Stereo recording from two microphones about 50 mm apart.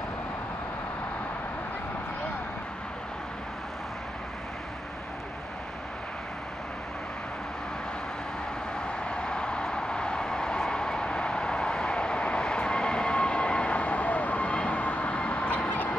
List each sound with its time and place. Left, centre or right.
8.7 s vehicle: centre